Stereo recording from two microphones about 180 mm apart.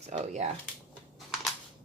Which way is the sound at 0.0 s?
40° right (ahead or behind).